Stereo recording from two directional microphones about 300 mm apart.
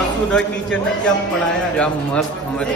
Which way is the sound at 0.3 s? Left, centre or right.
Centre.